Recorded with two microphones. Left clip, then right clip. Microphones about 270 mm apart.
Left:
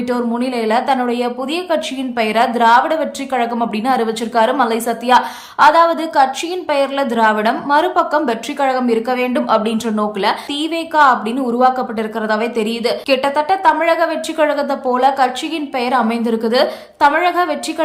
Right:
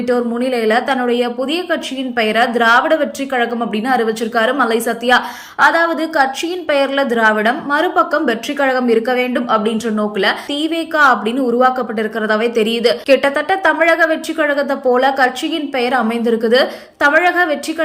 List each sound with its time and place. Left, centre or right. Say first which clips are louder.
0.1 s a woman's voice: right 4 dB; centre